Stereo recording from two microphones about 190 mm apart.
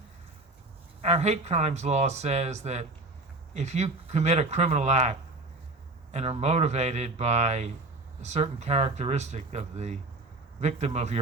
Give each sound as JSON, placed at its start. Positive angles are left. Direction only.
{"t": 1.0, "sound": "speech", "side_deg": -35}